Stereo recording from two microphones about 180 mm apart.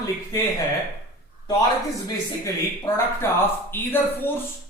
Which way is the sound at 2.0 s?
20° left (ahead or behind).